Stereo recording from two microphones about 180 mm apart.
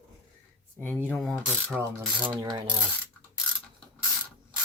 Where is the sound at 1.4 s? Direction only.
10° right (ahead or behind).